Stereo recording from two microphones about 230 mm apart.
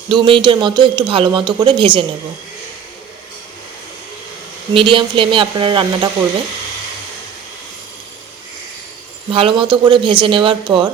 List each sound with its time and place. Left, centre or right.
0.1 s speech: right
4.7 s speech: right
9.3 s speech: right